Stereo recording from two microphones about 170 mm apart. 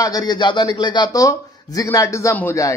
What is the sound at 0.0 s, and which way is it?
A man's voice, 20° left (ahead or behind).